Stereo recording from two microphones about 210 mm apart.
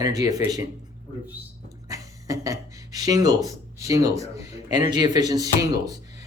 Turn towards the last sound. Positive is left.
turn(degrees=-15)  # may be behind; listen again after turning